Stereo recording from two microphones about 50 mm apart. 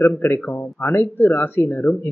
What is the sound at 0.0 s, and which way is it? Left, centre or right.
Speech, left.